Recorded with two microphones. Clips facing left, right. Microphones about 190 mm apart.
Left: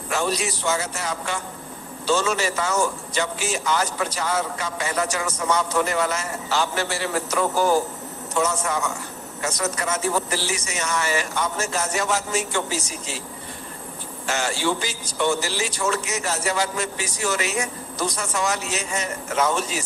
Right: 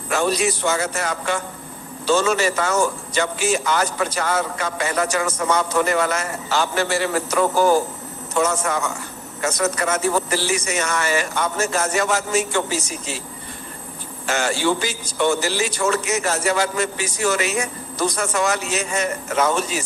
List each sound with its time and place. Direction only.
0.1 s speech: 55° right (ahead or behind)
14.3 s speech: 55° right (ahead or behind)